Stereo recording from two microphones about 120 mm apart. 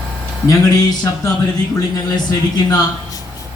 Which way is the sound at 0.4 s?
30° left (ahead or behind).